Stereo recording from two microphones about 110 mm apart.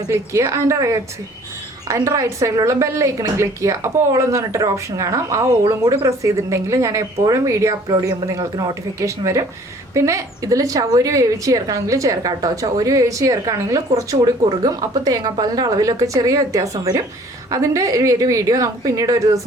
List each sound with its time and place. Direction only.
0.1 s a woman's voice: 25° right (ahead or behind)